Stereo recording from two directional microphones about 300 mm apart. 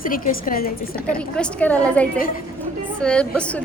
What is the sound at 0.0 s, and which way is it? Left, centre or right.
Speech, left.